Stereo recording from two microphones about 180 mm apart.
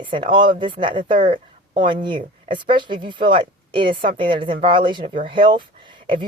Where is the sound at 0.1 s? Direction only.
25° right (ahead or behind).